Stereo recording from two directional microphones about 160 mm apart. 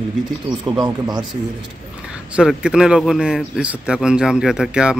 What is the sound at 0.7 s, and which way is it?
Speech, 25° right (ahead or behind).